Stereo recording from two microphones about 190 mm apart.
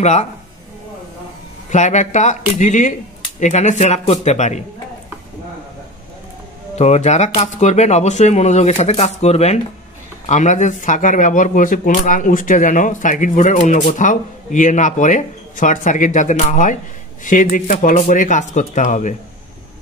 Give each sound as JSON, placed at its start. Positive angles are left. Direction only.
{"t": 0.0, "sound": "speech", "side_deg": 35}
{"t": 1.7, "sound": "speech", "side_deg": 40}
{"t": 6.7, "sound": "speech", "side_deg": 35}